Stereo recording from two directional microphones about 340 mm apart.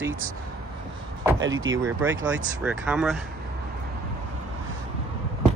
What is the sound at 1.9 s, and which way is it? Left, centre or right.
Speech, centre.